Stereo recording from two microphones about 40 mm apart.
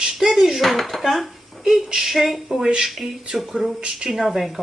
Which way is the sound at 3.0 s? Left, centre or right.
Centre.